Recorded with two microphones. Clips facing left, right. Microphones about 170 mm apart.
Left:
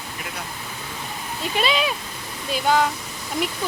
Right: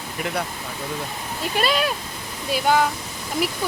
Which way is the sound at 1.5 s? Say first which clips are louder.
Right 1 dB; centre (ahead or behind).